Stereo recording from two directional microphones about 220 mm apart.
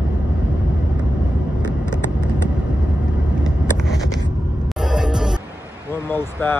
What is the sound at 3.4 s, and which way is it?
Vehicle, centre (ahead or behind).